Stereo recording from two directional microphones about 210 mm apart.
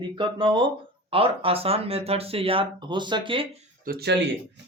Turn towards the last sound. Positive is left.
turn(degrees=-45)  # may be behind; listen again after turning